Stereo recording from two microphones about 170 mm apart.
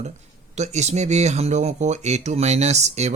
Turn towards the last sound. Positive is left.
turn(degrees=-40)  # may be behind; listen again after turning